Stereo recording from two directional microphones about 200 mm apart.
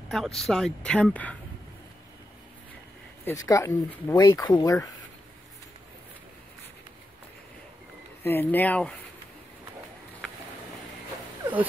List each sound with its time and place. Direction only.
0.1 s speech: centre (ahead or behind)
3.4 s speech: 15° left (ahead or behind)
8.2 s speech: 10° left (ahead or behind)